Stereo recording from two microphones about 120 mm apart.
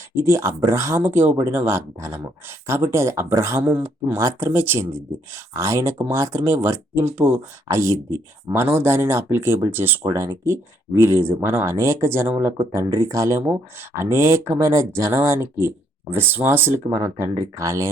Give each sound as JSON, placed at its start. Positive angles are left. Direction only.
{"t": 0.3, "sound": "speech", "side_deg": -25}
{"t": 4.2, "sound": "speech", "side_deg": -25}